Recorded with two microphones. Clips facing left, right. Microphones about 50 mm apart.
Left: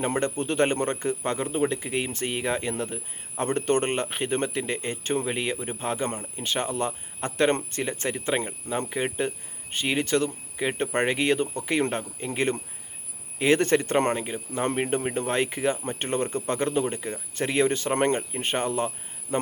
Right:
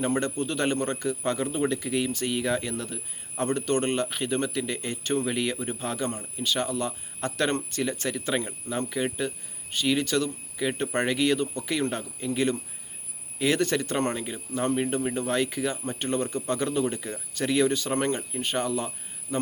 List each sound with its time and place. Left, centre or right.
0.0 s speech: left